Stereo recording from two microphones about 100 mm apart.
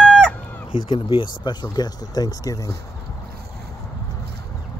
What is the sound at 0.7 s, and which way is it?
Speech, 60° left (ahead or behind).